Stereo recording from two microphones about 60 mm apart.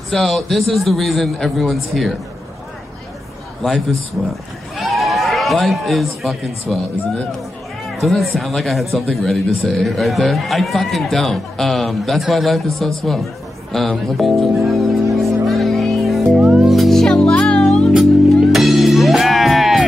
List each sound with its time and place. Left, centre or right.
0.1 s speech: centre
4.7 s speech: centre
8.0 s speech: centre
14.5 s music: centre
16.3 s music: centre
16.6 s music: centre
17.0 s music: centre
18.3 s music: centre